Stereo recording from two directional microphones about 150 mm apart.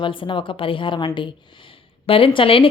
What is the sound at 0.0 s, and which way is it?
Speech, 35° left (ahead or behind).